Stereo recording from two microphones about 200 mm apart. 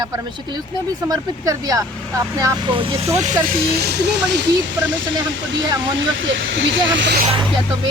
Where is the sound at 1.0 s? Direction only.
20° right (ahead or behind).